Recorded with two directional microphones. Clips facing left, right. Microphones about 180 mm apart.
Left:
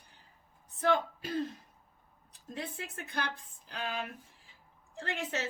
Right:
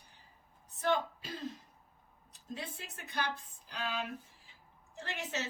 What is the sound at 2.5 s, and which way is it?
A woman's voice, 55° left (ahead or behind).